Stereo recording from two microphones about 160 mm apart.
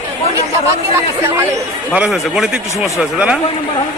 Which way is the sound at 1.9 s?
5° right (ahead or behind).